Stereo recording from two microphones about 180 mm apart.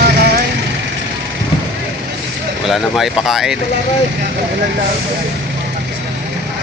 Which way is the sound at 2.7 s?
Centre (ahead or behind).